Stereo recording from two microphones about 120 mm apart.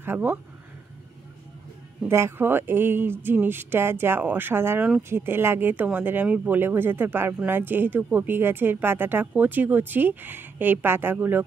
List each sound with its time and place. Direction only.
0.0 s speech: 15° right (ahead or behind)
2.0 s speech: 20° right (ahead or behind)